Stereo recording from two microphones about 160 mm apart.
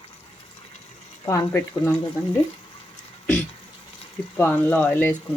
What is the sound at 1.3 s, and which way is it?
Speech, 15° left (ahead or behind).